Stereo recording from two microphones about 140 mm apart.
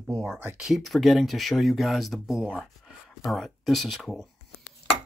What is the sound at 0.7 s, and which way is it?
Speech, centre (ahead or behind).